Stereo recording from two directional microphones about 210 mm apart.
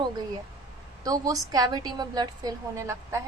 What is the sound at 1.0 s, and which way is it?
A woman's voice, 15° right (ahead or behind).